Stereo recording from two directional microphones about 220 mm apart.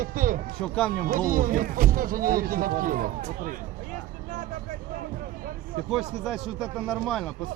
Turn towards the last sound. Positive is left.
turn(degrees=0)  # may be behind; listen again after turning